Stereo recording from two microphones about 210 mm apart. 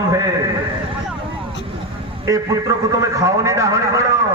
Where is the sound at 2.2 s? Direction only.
15° right (ahead or behind).